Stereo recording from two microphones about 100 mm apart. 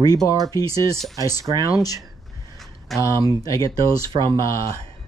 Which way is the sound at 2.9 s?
30° right (ahead or behind).